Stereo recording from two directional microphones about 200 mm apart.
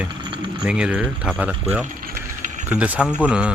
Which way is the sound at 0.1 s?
25° right (ahead or behind).